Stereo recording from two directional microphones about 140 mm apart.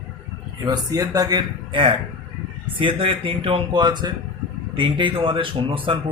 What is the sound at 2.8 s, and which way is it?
Speech, 40° right (ahead or behind).